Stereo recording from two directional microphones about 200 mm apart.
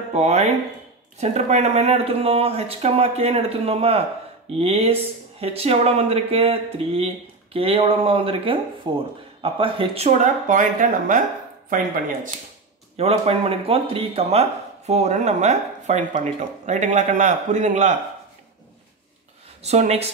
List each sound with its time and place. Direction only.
0.1 s speech: 30° right (ahead or behind)
12.9 s speech: 30° right (ahead or behind)
19.6 s speech: 35° right (ahead or behind)